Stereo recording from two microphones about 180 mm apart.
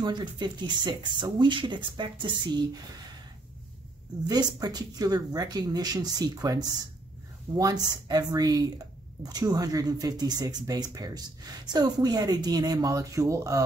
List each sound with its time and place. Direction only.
0.0 s speech: 25° right (ahead or behind)
4.3 s speech: 20° right (ahead or behind)